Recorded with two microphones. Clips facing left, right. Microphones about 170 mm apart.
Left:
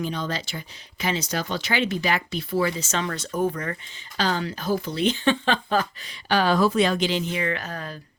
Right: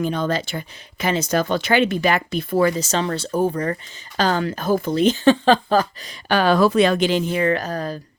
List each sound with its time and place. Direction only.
0.0 s speech: 55° right (ahead or behind); by 3.8 s 35° right (ahead or behind)
4.2 s speech: 50° right (ahead or behind)